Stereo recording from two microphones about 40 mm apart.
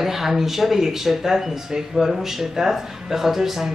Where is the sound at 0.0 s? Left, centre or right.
Centre.